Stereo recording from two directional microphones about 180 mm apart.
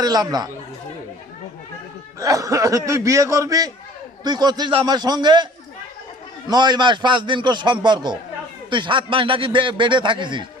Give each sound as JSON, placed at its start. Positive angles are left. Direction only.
{"t": 0.0, "sound": "a man's voice", "side_deg": -20}
{"t": 2.1, "sound": "a man's voice", "side_deg": -20}
{"t": 6.5, "sound": "a man's voice", "side_deg": -25}